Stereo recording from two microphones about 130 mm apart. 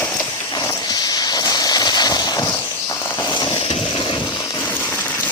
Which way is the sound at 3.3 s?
35° left (ahead or behind).